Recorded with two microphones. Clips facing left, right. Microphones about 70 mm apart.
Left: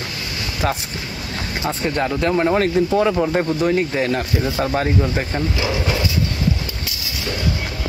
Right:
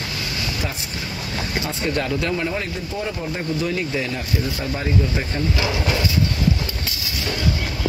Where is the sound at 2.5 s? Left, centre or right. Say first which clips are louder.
Left 10 dB; left.